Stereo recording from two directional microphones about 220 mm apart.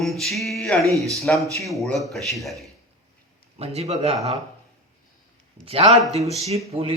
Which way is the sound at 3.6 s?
30° right (ahead or behind).